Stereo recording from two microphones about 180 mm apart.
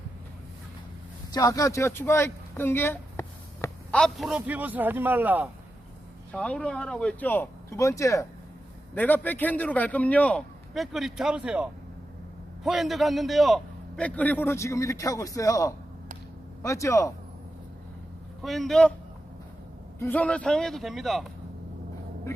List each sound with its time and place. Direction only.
1.3 s speech: 20° left (ahead or behind)
4.0 s speech: centre (ahead or behind)
6.3 s a man's voice: 5° left (ahead or behind)
18.4 s a man's voice: centre (ahead or behind)
20.0 s a man's voice: 10° left (ahead or behind)